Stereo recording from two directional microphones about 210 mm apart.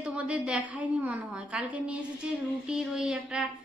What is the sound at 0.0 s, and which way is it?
A woman's voice, 5° right (ahead or behind).